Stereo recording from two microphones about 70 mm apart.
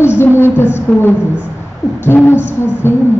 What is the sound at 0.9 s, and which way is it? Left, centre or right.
A woman's voice, left.